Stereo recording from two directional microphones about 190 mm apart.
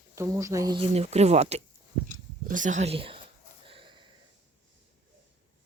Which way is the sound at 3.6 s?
25° right (ahead or behind).